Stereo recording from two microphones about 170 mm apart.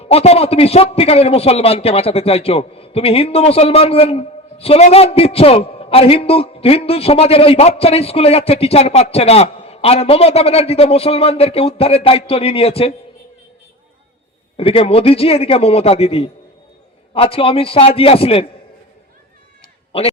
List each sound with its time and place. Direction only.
0.0 s a man's voice: 35° left (ahead or behind)
14.5 s a man's voice: 35° left (ahead or behind)